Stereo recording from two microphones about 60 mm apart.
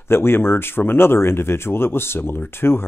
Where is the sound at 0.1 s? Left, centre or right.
Left.